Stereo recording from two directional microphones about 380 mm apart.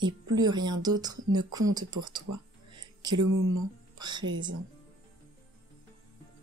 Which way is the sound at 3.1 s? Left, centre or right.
Right.